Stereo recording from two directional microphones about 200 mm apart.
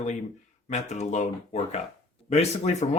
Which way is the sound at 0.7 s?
35° left (ahead or behind).